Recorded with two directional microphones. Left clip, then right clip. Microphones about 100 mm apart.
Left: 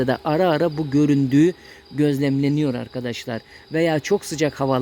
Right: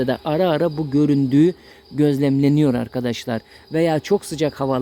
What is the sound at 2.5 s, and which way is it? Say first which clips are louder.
Speech: right 4 dB; 40° right (ahead or behind).